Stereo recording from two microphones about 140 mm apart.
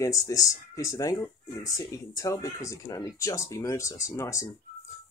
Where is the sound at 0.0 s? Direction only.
25° left (ahead or behind).